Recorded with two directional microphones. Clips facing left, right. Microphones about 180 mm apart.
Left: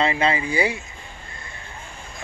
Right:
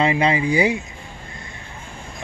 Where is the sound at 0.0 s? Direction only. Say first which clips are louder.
Right 3 dB; 15° right (ahead or behind).